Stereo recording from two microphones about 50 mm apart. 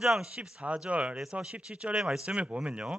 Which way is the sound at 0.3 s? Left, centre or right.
Right.